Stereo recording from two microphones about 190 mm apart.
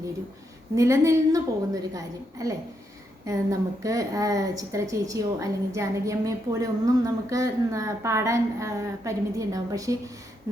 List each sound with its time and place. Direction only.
0.8 s speech: 15° right (ahead or behind)